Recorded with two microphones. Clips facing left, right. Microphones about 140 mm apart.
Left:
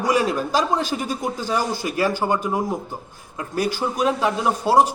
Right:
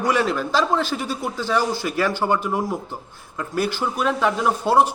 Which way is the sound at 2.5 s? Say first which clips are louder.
Left 1 dB; 15° left (ahead or behind).